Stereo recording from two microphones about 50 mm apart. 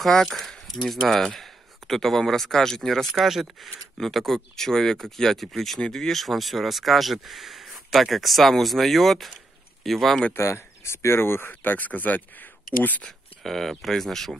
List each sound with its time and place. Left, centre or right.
0.0 s speech: centre
10.3 s speech: left
13.4 s speech: centre